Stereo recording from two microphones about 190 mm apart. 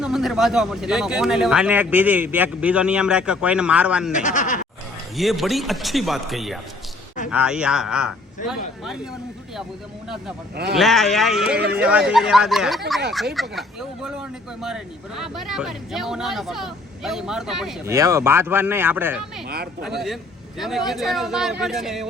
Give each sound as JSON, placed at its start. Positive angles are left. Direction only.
{"t": 0.0, "sound": "speech", "side_deg": 0}
{"t": 4.1, "sound": "speech", "side_deg": 40}
{"t": 5.1, "sound": "speech", "side_deg": 0}
{"t": 10.8, "sound": "speech", "side_deg": 0}
{"t": 17.8, "sound": "speech", "side_deg": -15}
{"t": 20.6, "sound": "speech", "side_deg": 0}